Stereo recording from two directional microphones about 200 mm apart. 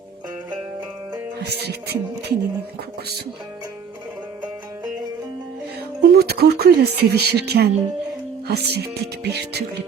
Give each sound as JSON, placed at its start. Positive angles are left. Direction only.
{"t": 1.4, "sound": "speech", "side_deg": -55}
{"t": 6.0, "sound": "speech", "side_deg": -55}